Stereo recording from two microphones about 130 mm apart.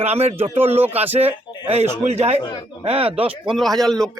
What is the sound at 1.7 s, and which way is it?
Speech, 55° right (ahead or behind).